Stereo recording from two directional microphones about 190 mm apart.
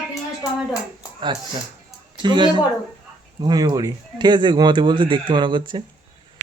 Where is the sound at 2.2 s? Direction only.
25° right (ahead or behind).